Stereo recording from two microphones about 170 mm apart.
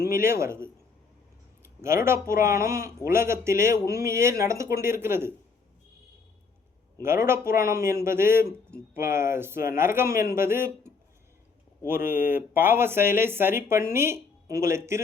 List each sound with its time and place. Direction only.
0.1 s speech: 15° right (ahead or behind)
1.8 s speech: 15° right (ahead or behind)
7.0 s speech: 15° right (ahead or behind)